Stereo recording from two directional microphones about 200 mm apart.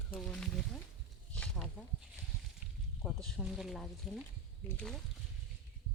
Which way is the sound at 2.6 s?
5° right (ahead or behind).